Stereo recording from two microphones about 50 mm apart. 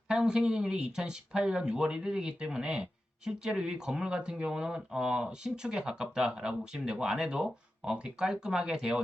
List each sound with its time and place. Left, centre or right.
0.1 s speech: centre